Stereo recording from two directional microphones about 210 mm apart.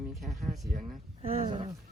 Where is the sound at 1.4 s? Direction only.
20° right (ahead or behind).